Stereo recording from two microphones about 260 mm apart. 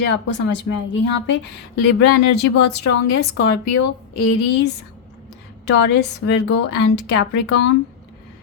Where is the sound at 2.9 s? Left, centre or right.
Left.